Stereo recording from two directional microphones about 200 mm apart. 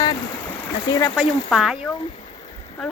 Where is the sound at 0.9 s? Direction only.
15° left (ahead or behind).